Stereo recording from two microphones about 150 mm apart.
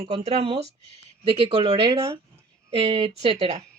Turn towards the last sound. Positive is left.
turn(degrees=-45)  # may be behind; listen again after turning